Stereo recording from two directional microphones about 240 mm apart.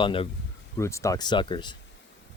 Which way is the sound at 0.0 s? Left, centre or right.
Left.